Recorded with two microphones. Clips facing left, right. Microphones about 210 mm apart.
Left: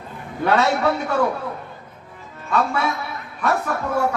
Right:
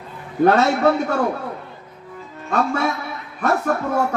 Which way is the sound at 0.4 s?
40° right (ahead or behind).